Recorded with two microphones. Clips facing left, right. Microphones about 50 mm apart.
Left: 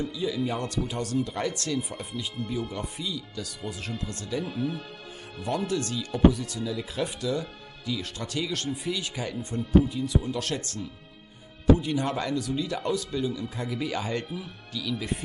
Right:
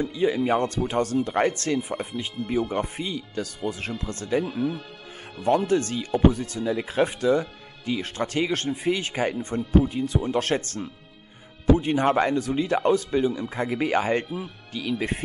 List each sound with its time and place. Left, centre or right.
0.1 s speech: right
4.5 s speech: centre
5.7 s speech: right